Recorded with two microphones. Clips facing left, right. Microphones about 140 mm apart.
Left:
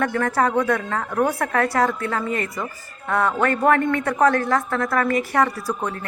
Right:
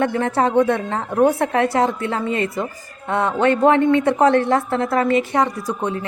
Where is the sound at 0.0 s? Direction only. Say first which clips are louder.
Right 2 dB; 25° right (ahead or behind).